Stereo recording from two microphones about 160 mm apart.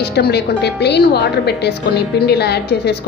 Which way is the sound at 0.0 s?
90° left.